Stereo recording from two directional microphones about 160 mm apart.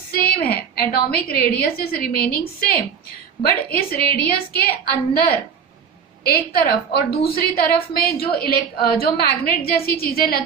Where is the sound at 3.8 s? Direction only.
75° left (ahead or behind).